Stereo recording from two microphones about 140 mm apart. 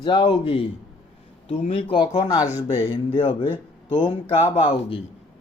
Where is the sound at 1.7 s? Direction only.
40° left (ahead or behind).